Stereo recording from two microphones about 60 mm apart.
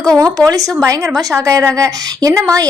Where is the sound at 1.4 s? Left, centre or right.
Right.